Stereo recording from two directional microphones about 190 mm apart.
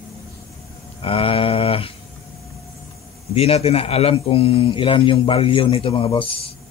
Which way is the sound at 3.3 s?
30° left (ahead or behind).